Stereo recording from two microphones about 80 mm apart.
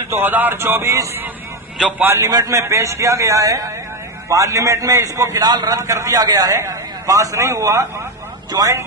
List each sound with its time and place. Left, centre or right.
0.1 s a sound: right
2.1 s a man's voice: right
5.5 s a man's voice: right
8.5 s speech: right